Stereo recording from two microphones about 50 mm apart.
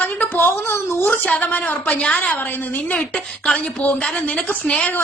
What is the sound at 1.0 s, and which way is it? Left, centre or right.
Speech, left.